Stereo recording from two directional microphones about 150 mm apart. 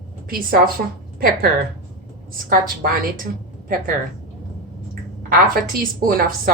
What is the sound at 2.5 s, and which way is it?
Speech, 70° right (ahead or behind).